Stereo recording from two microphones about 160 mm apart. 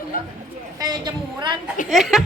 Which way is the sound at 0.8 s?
25° right (ahead or behind).